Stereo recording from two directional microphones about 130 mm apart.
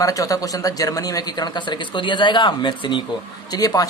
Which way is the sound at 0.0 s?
25° left (ahead or behind).